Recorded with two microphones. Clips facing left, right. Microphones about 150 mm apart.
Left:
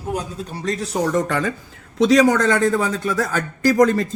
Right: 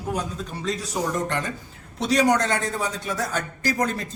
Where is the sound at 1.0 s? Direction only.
90° left.